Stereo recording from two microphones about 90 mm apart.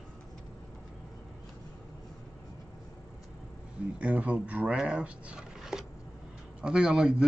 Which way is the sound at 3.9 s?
15° right (ahead or behind).